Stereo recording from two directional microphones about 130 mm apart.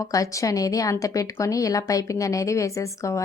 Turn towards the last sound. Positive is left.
turn(degrees=25)  # may be behind; listen again after turning